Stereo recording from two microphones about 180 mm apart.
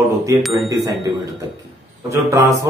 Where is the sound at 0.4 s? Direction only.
Centre (ahead or behind).